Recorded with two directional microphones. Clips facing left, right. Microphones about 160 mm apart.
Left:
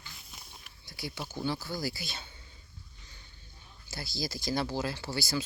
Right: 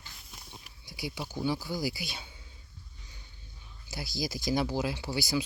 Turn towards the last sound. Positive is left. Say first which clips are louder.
# right 2 dB
turn(degrees=-15)  # may be behind; listen again after turning